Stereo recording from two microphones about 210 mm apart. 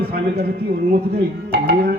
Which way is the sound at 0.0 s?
50° right (ahead or behind).